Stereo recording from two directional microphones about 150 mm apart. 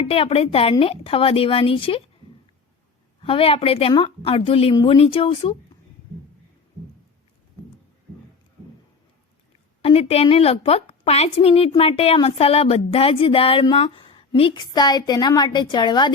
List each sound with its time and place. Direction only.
0.1 s a woman's voice: 40° left (ahead or behind)
3.2 s a woman's voice: 35° left (ahead or behind)
9.8 s a woman's voice: 40° left (ahead or behind)